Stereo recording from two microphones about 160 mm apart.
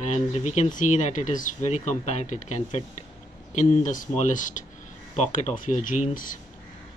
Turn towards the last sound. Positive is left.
turn(degrees=55)  # may be behind; listen again after turning